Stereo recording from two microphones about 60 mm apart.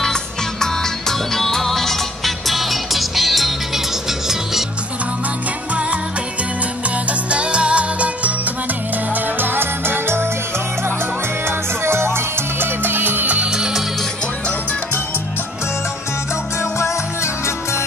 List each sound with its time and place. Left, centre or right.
0.0 s music: centre
7.1 s music: centre
9.1 s music: right
11.4 s music: right
13.5 s music: centre
16.7 s music: left